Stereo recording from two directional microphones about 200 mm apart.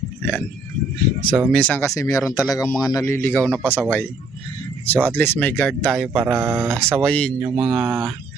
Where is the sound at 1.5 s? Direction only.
5° left (ahead or behind).